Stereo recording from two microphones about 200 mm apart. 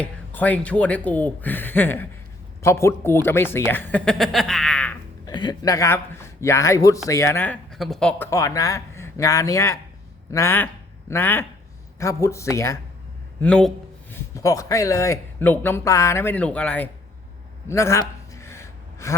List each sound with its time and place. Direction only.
0.0 s speech: 10° left (ahead or behind)
5.2 s a man's voice: 20° left (ahead or behind)
13.4 s a sound: 5° left (ahead or behind)
14.3 s speech: 15° left (ahead or behind)
18.3 s gasp: 15° left (ahead or behind)